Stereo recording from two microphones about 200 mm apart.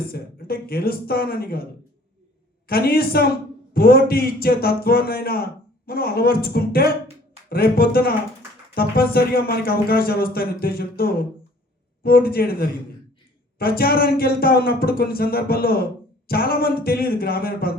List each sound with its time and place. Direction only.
0.1 s a man's voice: 50° left (ahead or behind)
2.6 s a man's voice: 50° left (ahead or behind)